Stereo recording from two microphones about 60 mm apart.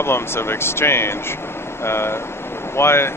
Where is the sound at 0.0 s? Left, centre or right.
Left.